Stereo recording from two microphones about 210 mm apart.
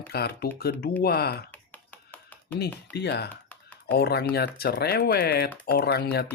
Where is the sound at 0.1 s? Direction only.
50° left (ahead or behind).